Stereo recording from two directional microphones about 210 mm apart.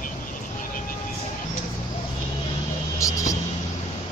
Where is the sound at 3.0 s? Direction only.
15° left (ahead or behind).